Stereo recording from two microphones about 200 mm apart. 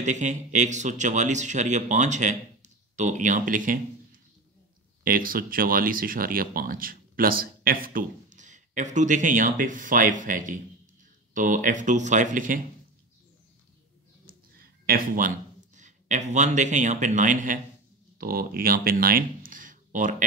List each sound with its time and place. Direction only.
0.0 s speech: 35° right (ahead or behind)
14.2 s a sound: 45° right (ahead or behind)
18.1 s speech: 45° right (ahead or behind)